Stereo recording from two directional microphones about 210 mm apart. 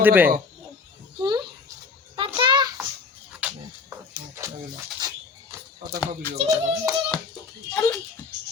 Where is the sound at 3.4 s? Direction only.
5° right (ahead or behind).